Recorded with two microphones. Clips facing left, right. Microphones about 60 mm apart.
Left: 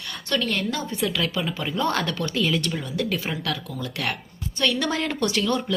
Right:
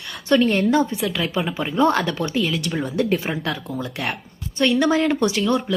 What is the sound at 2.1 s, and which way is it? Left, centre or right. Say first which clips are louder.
Speech: right 4 dB; right.